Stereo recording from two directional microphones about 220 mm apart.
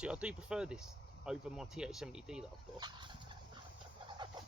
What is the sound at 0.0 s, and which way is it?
Speech, 5° right (ahead or behind).